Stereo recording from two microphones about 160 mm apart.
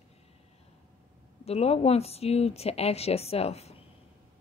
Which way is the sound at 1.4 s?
40° left (ahead or behind).